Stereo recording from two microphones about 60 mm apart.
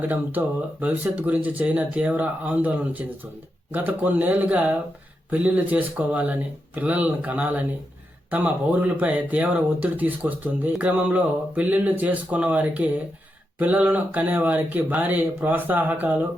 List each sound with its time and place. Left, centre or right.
0.1 s speech: right